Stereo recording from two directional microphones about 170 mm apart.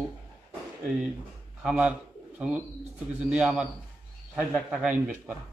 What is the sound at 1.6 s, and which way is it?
Speech, 5° right (ahead or behind).